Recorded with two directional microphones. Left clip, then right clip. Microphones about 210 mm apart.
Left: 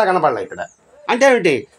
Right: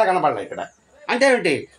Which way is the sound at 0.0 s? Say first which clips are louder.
Left 3 dB; 35° left (ahead or behind).